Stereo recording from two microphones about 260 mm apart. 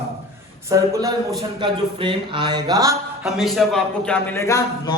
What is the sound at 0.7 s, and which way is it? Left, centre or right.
Speech, centre.